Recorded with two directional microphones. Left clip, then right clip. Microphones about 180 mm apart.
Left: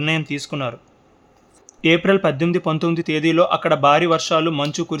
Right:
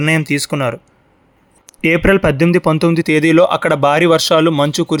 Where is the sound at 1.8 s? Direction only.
30° right (ahead or behind).